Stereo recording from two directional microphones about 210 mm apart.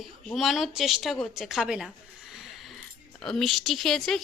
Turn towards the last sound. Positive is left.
turn(degrees=0)  # may be behind; listen again after turning